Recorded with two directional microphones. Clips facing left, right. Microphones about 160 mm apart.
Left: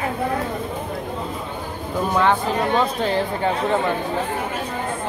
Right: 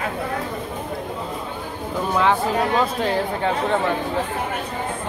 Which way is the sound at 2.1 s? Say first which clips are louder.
Even; centre (ahead or behind).